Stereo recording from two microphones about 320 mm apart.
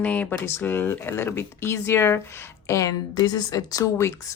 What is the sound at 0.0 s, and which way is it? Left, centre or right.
Speech, centre.